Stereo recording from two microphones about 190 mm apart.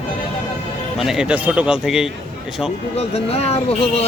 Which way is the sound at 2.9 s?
35° left (ahead or behind).